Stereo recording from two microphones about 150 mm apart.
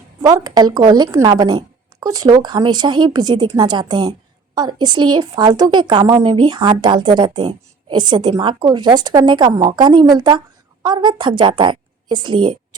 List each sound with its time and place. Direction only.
0.2 s a woman's voice: 25° right (ahead or behind)